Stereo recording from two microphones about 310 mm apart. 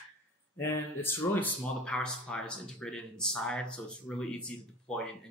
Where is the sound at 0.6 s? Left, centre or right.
Centre.